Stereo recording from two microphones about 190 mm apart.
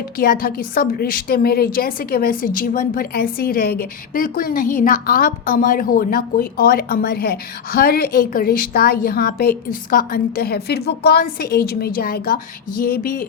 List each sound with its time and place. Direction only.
0.2 s a woman's voice: 50° left (ahead or behind)